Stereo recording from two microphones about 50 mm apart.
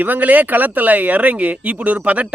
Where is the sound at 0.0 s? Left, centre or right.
Right.